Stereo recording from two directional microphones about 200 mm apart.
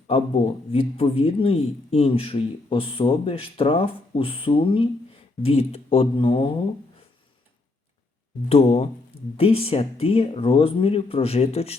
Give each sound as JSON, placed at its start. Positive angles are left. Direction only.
{"t": 0.7, "sound": "speech", "side_deg": 30}
{"t": 8.4, "sound": "speech", "side_deg": 30}